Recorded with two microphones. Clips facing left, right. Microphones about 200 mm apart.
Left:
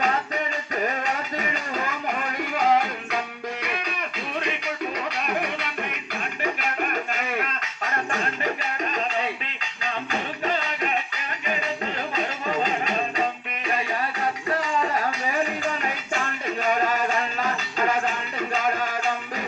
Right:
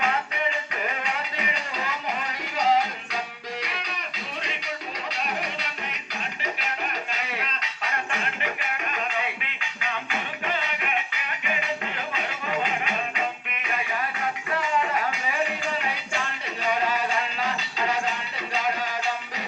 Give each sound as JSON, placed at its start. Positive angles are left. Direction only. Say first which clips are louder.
{"t": 0.7, "sound": "music", "louder": "left 4 dB", "side_deg": 45}
{"t": 3.6, "sound": "a sound", "louder": "left 5 dB", "side_deg": 55}
{"t": 4.4, "sound": "music", "louder": "left 7 dB", "side_deg": 55}
{"t": 12.1, "sound": "music", "louder": "left 3 dB", "side_deg": 40}